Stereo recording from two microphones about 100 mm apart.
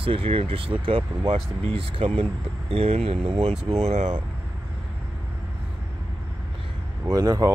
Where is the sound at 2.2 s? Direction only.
80° right.